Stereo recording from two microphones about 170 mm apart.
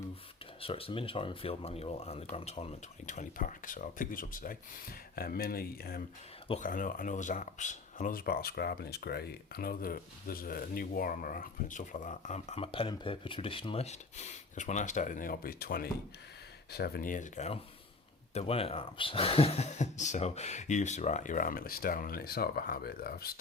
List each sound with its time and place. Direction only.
0.6 s speech: 35° left (ahead or behind); by 6.0 s 65° left (ahead or behind)
6.6 s speech: 55° left (ahead or behind)